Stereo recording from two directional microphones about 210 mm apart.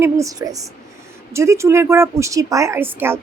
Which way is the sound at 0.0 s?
15° right (ahead or behind).